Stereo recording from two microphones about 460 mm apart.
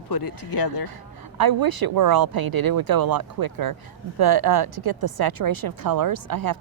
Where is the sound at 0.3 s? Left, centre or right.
Left.